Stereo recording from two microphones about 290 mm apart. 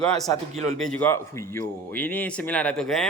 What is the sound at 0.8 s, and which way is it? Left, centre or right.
A man's voice, centre.